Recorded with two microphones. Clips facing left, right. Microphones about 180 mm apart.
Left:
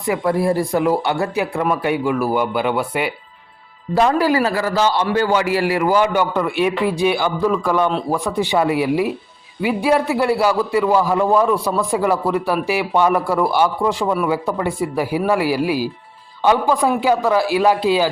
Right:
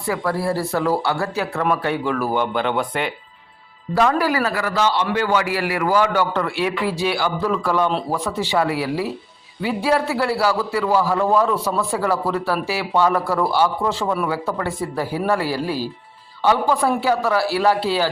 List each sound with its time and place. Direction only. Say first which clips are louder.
0.0 s speech: left 4 dB; 20° left (ahead or behind)
3.9 s a man's voice: left 3 dB; 25° left (ahead or behind)